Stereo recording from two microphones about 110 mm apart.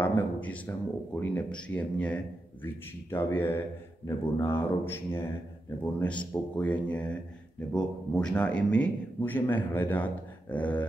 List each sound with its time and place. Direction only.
0.0 s speech: 15° left (ahead or behind)